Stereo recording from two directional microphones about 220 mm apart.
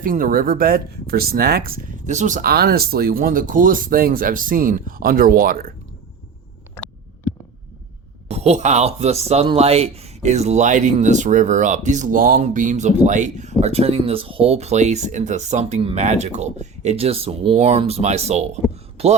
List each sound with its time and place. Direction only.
0.0 s speech: 40° right (ahead or behind)
6.7 s a sound: 5° left (ahead or behind)
8.3 s speech: 30° right (ahead or behind)